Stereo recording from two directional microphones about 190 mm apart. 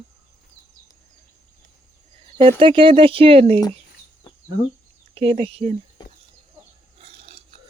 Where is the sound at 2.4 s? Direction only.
30° right (ahead or behind).